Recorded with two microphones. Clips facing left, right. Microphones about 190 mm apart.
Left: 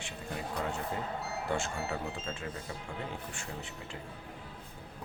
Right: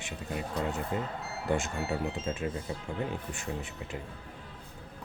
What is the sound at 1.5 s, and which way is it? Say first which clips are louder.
Speech: right 5 dB; 20° right (ahead or behind).